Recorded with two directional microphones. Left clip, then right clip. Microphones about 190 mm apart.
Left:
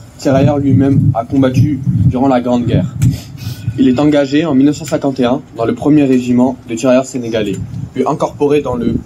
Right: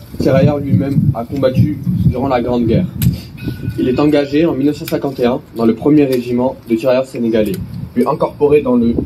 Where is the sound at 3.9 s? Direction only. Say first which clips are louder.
Even; 55° left (ahead or behind).